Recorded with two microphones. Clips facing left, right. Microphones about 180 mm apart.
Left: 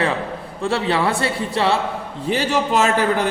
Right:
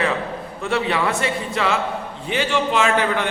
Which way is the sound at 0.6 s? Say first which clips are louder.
Left 2 dB; 30° left (ahead or behind).